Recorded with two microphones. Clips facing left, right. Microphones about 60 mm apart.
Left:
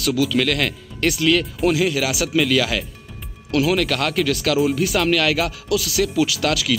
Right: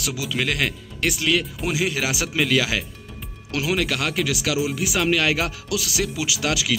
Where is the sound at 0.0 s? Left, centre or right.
Centre.